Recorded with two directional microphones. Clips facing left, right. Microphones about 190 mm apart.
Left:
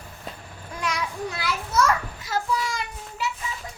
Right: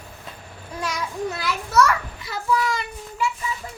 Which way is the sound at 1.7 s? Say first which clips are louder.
Right 3 dB; 65° right (ahead or behind).